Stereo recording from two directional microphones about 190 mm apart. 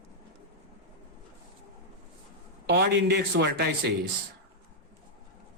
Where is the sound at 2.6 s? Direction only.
65° right (ahead or behind).